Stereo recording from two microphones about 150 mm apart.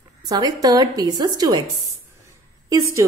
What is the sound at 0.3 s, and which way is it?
A woman's voice, 25° right (ahead or behind).